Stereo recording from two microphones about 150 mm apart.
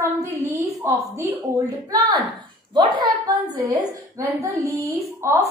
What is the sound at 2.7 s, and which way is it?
A woman's voice, 30° right (ahead or behind).